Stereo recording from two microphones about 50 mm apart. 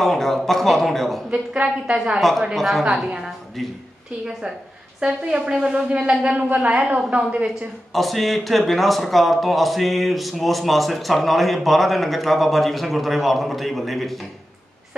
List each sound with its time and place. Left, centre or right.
0.0 s a man's voice: centre
1.3 s a woman's voice: right
2.1 s a man's voice: centre
4.3 s a woman's voice: centre
5.0 s a woman's voice: right
7.9 s a man's voice: centre